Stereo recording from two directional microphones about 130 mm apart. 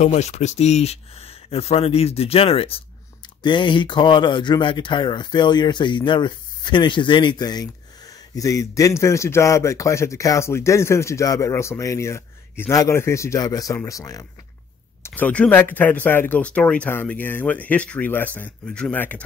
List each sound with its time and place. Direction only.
0.0 s a man's voice: 60° left (ahead or behind); by 14.2 s 25° left (ahead or behind)
15.0 s speech: 10° left (ahead or behind)